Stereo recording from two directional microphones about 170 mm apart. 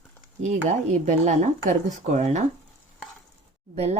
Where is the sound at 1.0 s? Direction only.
40° right (ahead or behind).